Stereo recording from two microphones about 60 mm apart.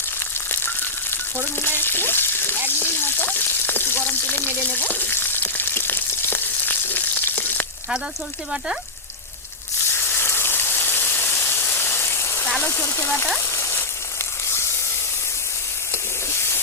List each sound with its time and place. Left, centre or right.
1.6 s frying: left
10.0 s rain: left
12.6 s speech: left
13.6 s a sound: left